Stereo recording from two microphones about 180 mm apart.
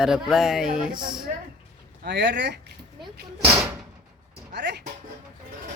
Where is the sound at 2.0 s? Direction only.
70° right (ahead or behind).